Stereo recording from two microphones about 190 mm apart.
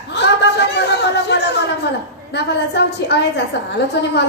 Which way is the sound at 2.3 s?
60° left (ahead or behind).